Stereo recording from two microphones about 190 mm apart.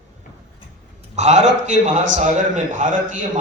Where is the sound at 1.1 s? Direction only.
40° right (ahead or behind).